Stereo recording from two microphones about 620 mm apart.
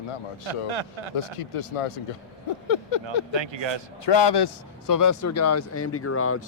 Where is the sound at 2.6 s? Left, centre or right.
Left.